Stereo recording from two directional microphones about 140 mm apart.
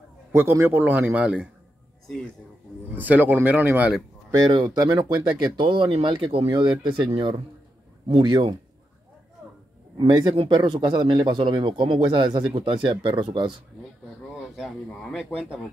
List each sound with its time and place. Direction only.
0.3 s a man's voice: 15° right (ahead or behind)
2.9 s a man's voice: 10° right (ahead or behind)
4.5 s speech: 25° right (ahead or behind)
9.9 s speech: 30° right (ahead or behind)
14.5 s speech: centre (ahead or behind)